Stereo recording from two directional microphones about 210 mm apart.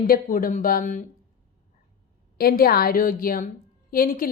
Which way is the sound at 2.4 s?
45° left (ahead or behind).